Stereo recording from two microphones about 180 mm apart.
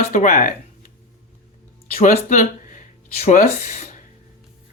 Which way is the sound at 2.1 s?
45° left (ahead or behind).